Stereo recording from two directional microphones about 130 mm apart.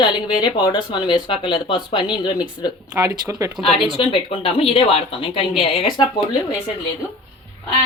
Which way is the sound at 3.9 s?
40° left (ahead or behind).